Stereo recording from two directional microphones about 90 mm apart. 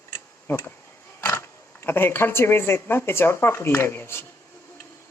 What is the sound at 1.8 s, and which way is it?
Speech, 25° left (ahead or behind).